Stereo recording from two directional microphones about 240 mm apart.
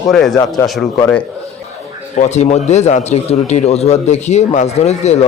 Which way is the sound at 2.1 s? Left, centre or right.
Left.